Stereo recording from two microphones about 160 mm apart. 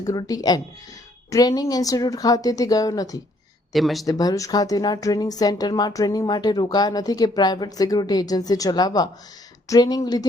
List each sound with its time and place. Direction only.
0.0 s a woman's voice: 20° left (ahead or behind)
3.7 s speech: centre (ahead or behind)
4.0 s a woman's voice: 25° left (ahead or behind)